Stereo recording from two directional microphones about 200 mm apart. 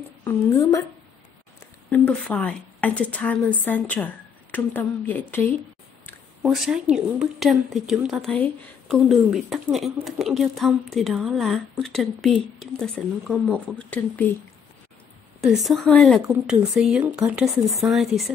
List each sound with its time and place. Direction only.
0.2 s a woman's voice: 15° left (ahead or behind)
1.9 s a woman's voice: 5° left (ahead or behind)
6.4 s a woman's voice: centre (ahead or behind)
15.4 s a woman's voice: centre (ahead or behind)